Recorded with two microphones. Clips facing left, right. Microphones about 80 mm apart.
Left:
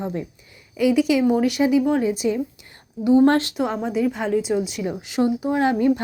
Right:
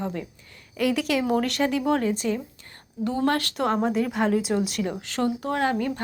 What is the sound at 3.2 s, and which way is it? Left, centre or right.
Speech, left.